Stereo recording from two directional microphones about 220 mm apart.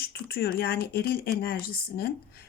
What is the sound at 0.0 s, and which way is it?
Speech, 45° left (ahead or behind).